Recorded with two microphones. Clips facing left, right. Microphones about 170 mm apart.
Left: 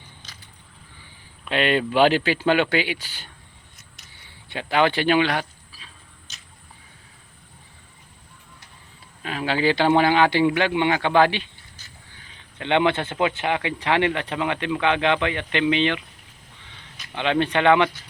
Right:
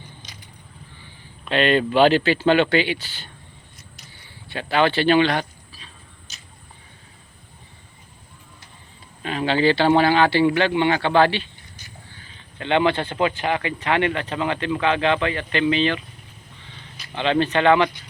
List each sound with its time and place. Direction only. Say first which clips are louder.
1.5 s speech: right 3 dB; 10° left (ahead or behind)
4.4 s speech: right 1 dB; 15° left (ahead or behind)
6.3 s a sound: even; 5° right (ahead or behind)
9.2 s speech: right 3 dB; 5° left (ahead or behind)
12.5 s speech: right 1 dB; 15° left (ahead or behind)
17.2 s speech: right 2 dB; 10° left (ahead or behind)